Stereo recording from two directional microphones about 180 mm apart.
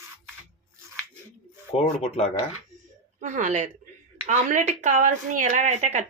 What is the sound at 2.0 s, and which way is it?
Speech, 35° left (ahead or behind).